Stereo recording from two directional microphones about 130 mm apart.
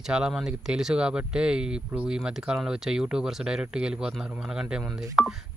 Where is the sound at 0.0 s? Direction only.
5° right (ahead or behind).